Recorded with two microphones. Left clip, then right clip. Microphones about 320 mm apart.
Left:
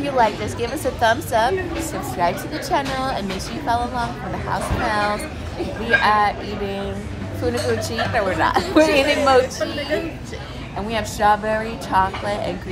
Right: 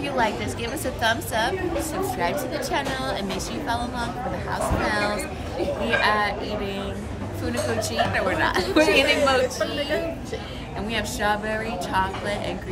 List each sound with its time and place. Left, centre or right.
0.0 s a woman's voice: centre
7.9 s a woman's voice: centre
10.9 s a woman's voice: centre